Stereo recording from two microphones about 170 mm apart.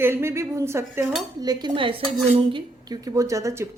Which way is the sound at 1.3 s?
25° right (ahead or behind).